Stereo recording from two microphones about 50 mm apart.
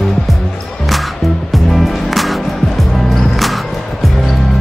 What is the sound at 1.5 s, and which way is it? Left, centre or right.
Music, centre.